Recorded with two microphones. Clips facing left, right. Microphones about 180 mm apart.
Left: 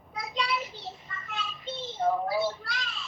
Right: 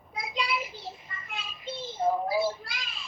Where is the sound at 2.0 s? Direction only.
10° right (ahead or behind).